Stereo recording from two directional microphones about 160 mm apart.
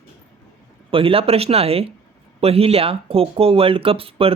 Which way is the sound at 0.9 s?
35° right (ahead or behind).